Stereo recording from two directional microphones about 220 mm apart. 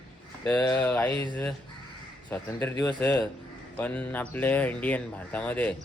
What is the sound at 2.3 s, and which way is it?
Speech, 10° left (ahead or behind).